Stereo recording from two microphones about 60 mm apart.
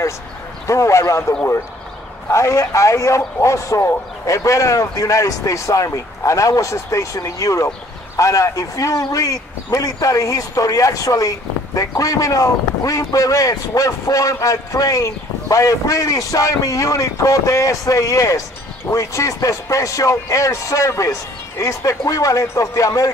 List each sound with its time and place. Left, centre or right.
0.7 s speech: left
2.3 s speech: left